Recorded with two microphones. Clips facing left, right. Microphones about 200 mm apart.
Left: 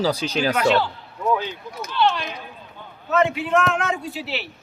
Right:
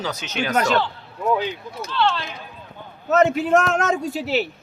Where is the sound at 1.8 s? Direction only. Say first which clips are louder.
Left 1 dB; 15° left (ahead or behind).